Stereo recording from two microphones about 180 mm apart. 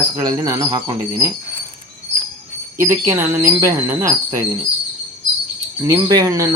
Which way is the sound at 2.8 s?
15° right (ahead or behind).